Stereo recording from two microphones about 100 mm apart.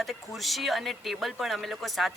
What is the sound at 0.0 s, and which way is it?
Speech, centre (ahead or behind).